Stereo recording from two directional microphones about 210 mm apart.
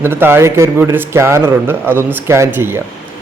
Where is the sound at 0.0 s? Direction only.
10° right (ahead or behind).